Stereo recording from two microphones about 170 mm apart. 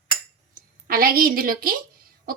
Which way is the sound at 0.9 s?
60° right (ahead or behind).